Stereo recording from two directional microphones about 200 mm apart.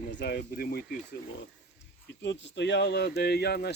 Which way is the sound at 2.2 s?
60° left (ahead or behind).